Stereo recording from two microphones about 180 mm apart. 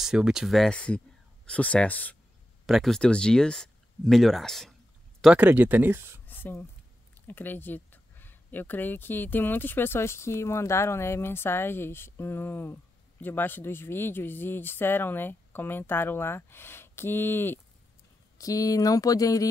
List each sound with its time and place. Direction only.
0.0 s speech: 5° right (ahead or behind)
6.2 s a sound: 10° left (ahead or behind)
7.2 s speech: 10° left (ahead or behind)